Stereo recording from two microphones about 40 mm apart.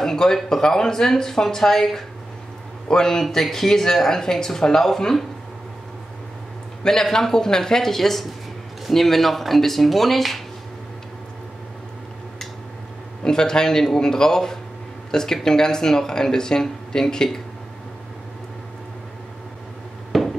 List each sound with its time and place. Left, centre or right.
0.0 s speech: centre
6.8 s speech: centre
13.2 s speech: centre
20.1 s a sound: centre